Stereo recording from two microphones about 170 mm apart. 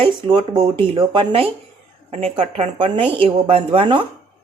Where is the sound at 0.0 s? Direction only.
30° right (ahead or behind).